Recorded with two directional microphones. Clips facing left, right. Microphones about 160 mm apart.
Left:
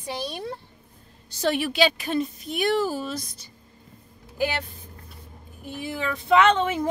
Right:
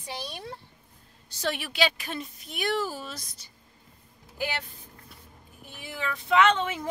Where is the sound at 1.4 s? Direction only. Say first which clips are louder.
Left 6 dB; 30° left (ahead or behind).